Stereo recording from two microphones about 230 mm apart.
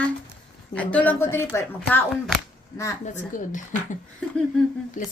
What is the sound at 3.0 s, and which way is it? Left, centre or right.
Speech, left.